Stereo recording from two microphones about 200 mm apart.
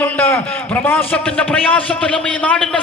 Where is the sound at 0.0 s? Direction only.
10° left (ahead or behind).